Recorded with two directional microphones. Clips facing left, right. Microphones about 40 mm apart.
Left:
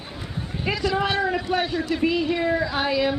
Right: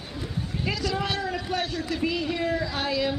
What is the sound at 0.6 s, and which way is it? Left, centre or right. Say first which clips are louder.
Speech: left 5 dB; left.